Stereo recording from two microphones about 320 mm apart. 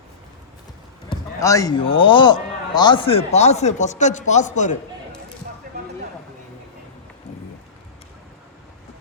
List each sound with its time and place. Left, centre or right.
1.1 s a man's voice: centre